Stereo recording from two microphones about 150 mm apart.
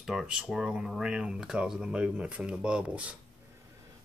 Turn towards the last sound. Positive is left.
turn(degrees=-5)  # may be behind; listen again after turning